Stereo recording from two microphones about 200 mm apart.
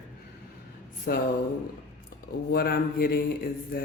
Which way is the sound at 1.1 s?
45° left (ahead or behind).